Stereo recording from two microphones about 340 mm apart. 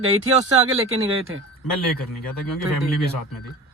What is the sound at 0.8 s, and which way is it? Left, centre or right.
Speech, right.